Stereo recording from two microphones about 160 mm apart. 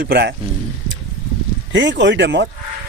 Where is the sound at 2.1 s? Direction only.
90° right.